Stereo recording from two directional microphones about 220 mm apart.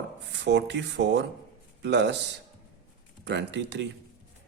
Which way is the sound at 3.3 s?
50° right (ahead or behind).